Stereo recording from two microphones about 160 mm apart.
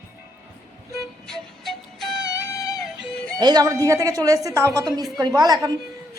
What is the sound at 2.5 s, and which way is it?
Music, 20° left (ahead or behind).